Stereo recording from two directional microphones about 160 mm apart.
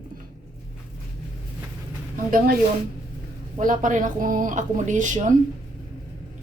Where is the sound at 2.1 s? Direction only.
60° right (ahead or behind).